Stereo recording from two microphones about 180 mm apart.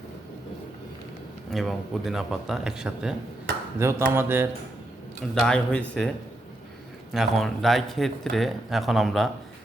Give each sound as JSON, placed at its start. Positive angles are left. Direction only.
{"t": 1.5, "sound": "speech", "side_deg": 0}
{"t": 3.8, "sound": "a sound", "side_deg": -15}
{"t": 5.3, "sound": "speech", "side_deg": 5}
{"t": 7.1, "sound": "speech", "side_deg": 0}